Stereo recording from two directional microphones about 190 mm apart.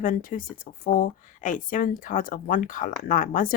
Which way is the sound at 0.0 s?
45° left (ahead or behind).